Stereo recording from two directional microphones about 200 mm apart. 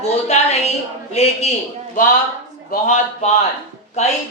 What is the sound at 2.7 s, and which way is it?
Speech, 35° left (ahead or behind).